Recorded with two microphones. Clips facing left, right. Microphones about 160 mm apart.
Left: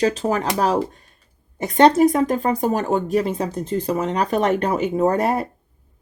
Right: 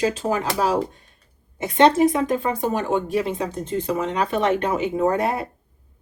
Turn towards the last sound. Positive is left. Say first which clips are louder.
# left 2 dB
turn(degrees=40)  # may be behind; listen again after turning